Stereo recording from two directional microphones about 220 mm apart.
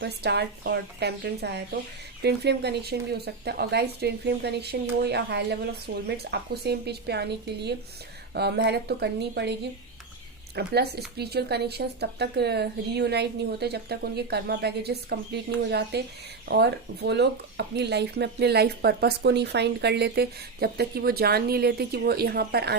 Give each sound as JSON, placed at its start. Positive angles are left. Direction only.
{"t": 0.0, "sound": "speech", "side_deg": -50}